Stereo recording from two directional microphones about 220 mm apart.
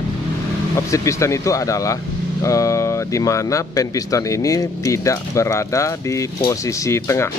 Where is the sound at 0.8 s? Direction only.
15° left (ahead or behind).